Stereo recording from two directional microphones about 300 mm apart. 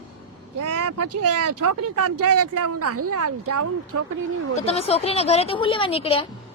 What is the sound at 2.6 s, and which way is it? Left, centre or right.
Speech, right.